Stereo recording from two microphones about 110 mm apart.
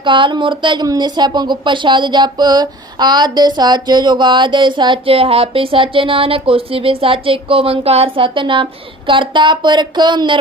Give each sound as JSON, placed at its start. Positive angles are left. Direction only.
{"t": 0.0, "sound": "speech", "side_deg": -50}